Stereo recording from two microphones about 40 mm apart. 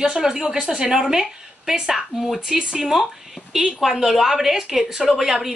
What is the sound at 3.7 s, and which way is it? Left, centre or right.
A woman's voice, centre.